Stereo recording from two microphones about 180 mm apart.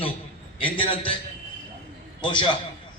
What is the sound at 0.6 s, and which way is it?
Speech, 30° left (ahead or behind).